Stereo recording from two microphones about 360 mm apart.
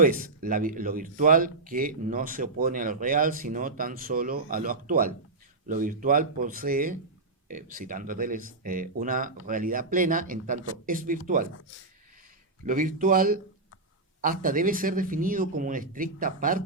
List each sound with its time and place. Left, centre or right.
0.0 s speech: right
12.6 s speech: right